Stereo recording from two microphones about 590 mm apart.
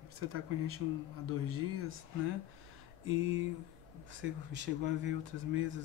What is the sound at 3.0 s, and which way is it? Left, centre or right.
Speech, centre.